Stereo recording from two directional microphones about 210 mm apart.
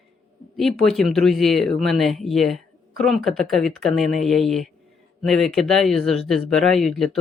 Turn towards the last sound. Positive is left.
turn(degrees=0)  # may be behind; listen again after turning